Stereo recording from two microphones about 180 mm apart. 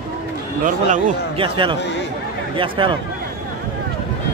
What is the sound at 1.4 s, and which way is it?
Speech, 30° right (ahead or behind).